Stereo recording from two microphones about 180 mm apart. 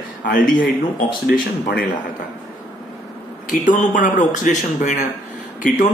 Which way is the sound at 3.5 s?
45° left (ahead or behind).